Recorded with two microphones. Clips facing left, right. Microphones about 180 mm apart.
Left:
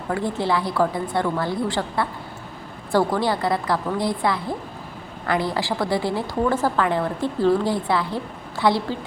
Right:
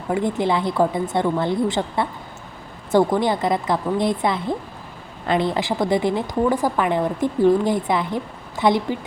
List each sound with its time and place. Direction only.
0.1 s a woman's voice: 20° right (ahead or behind)